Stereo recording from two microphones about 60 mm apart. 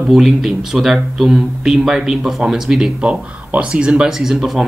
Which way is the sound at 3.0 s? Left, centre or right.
Right.